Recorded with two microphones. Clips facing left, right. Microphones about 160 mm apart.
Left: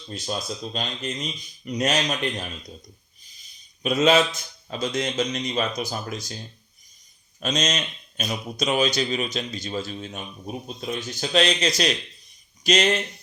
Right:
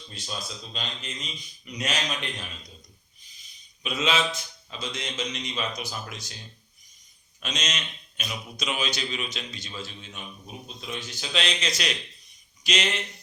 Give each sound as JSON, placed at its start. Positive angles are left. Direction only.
{"t": 0.1, "sound": "a man's voice", "side_deg": 45}
{"t": 7.3, "sound": "a man's voice", "side_deg": 40}